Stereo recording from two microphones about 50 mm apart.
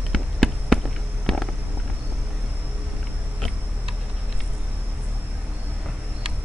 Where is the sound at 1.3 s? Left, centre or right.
Centre.